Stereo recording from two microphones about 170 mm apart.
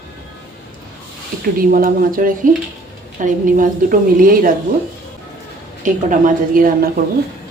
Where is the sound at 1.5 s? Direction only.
55° right (ahead or behind).